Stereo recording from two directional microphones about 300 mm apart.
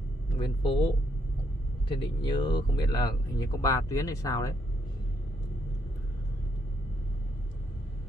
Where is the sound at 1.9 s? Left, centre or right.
Centre.